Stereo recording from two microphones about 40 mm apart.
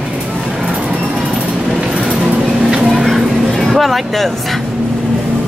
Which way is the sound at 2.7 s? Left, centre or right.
Centre.